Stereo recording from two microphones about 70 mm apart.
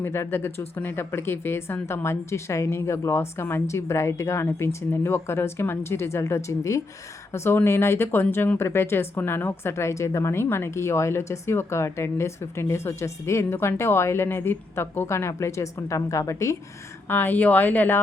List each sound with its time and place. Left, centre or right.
0.0 s speech: left
7.3 s speech: left
17.1 s speech: left